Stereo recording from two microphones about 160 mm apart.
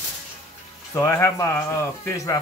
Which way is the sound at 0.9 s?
15° left (ahead or behind).